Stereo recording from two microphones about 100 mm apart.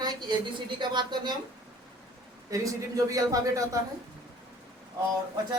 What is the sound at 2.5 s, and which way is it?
A man's voice, 35° right (ahead or behind).